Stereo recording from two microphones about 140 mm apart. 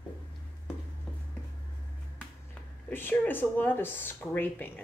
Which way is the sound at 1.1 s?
5° left (ahead or behind).